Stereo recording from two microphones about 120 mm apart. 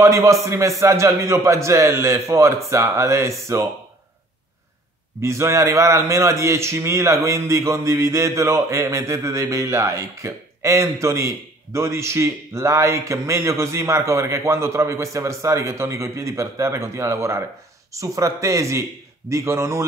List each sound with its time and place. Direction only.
0.0 s a man's voice: 25° right (ahead or behind)
5.2 s a man's voice: 25° right (ahead or behind)